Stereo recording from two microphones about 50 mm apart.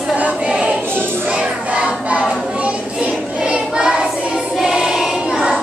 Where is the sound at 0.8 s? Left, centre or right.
Right.